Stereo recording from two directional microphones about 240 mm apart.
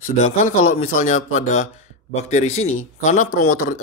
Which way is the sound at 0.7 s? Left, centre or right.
Left.